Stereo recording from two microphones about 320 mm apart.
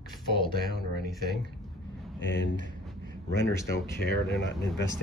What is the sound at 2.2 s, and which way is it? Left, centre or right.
Speech, left.